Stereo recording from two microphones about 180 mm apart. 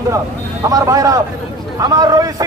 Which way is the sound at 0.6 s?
20° right (ahead or behind).